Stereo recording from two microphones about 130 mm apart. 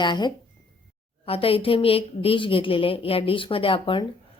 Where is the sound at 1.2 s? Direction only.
45° left (ahead or behind).